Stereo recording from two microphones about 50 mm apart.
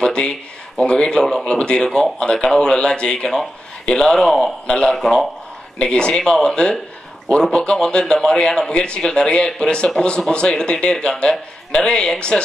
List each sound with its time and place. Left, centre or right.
0.0 s a sound: centre
0.7 s speech: centre
4.9 s speech: centre
5.8 s speech: centre